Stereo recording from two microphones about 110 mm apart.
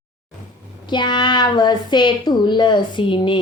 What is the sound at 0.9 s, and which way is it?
A woman's voice, 45° left (ahead or behind).